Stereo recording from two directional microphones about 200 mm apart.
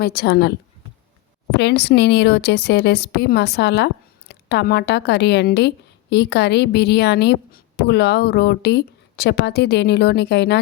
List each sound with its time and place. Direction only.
0.0 s a woman's voice: 50° left (ahead or behind)